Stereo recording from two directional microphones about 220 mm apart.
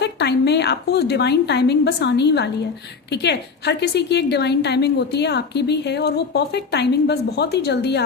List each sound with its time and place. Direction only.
0.0 s a woman's voice: 50° left (ahead or behind)